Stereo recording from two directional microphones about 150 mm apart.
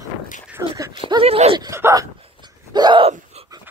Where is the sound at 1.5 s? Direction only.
20° right (ahead or behind).